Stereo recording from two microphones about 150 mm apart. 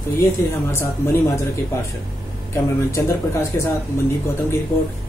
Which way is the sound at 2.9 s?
20° left (ahead or behind).